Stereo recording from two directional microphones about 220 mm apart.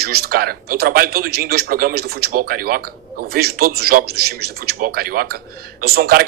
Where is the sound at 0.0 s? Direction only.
45° right (ahead or behind).